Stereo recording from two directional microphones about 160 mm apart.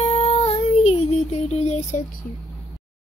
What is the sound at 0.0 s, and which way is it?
Child singing, 40° left (ahead or behind).